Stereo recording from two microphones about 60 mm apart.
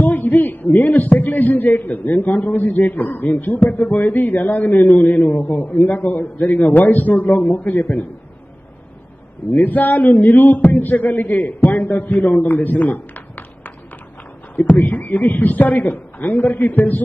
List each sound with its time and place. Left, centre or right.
0.0 s a man's voice: left
9.6 s a man's voice: left
14.8 s a man's voice: left